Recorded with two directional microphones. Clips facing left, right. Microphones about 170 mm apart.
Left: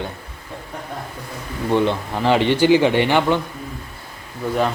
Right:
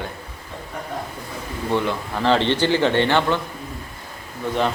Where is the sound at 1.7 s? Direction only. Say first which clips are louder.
Left 4 dB; 20° left (ahead or behind).